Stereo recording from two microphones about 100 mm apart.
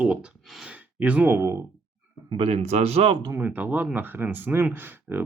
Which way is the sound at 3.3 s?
20° right (ahead or behind).